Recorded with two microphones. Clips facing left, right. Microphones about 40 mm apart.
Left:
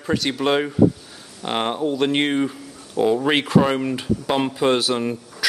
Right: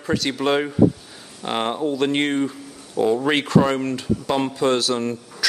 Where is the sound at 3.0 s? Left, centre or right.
Left.